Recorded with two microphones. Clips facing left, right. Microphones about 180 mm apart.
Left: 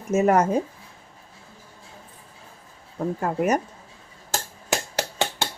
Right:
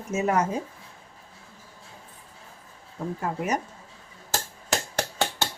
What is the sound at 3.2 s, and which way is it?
Speech, 55° left (ahead or behind).